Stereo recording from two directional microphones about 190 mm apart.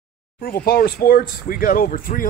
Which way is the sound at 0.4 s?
50° left (ahead or behind).